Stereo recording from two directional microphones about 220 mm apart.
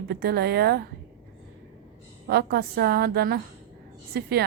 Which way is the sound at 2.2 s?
45° right (ahead or behind).